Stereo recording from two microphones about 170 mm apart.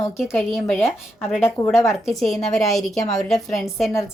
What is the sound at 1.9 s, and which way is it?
A woman's voice, centre (ahead or behind).